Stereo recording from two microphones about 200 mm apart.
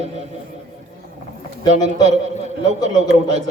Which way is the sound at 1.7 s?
35° right (ahead or behind).